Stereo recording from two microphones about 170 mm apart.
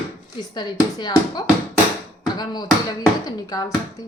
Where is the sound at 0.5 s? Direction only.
25° left (ahead or behind).